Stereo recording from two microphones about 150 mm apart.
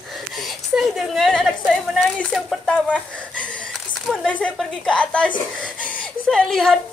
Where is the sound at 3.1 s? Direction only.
10° left (ahead or behind).